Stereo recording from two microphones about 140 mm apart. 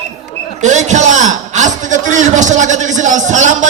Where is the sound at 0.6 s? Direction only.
60° right (ahead or behind).